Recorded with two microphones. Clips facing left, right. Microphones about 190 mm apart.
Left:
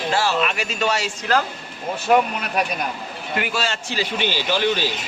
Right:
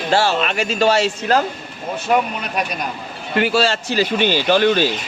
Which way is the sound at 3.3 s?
30° right (ahead or behind).